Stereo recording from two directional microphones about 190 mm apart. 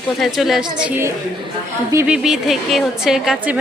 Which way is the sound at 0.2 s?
Centre (ahead or behind).